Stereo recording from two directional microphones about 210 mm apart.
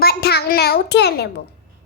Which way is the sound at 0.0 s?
50° left (ahead or behind).